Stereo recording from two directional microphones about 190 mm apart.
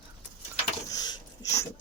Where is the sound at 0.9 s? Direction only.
20° left (ahead or behind).